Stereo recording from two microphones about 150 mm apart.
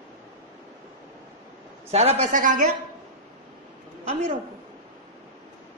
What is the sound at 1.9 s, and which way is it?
Speech, 45° right (ahead or behind).